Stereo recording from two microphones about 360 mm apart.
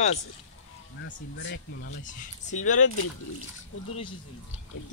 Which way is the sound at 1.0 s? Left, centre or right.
Left.